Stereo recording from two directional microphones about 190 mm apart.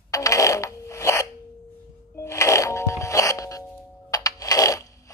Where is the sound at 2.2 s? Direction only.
15° left (ahead or behind).